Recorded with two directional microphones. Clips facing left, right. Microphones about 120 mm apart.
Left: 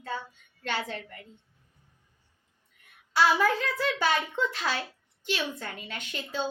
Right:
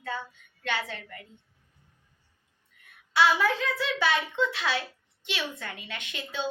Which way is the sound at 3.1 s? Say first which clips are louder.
Even; 40° left (ahead or behind).